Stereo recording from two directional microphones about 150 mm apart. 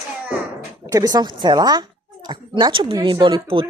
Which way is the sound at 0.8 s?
25° right (ahead or behind).